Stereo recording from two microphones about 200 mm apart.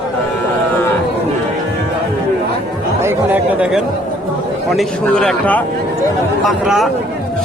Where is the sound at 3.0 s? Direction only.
10° right (ahead or behind).